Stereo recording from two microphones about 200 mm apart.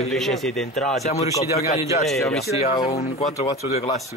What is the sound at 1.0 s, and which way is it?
Speech, 30° left (ahead or behind).